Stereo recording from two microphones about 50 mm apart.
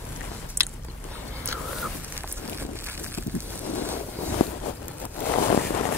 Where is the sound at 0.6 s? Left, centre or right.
Right.